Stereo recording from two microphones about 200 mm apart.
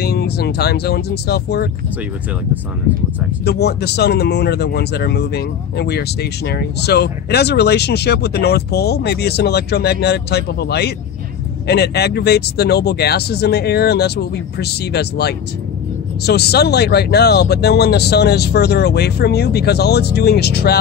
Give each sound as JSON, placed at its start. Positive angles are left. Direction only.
{"t": 0.0, "sound": "speech", "side_deg": 55}
{"t": 3.4, "sound": "speech", "side_deg": 55}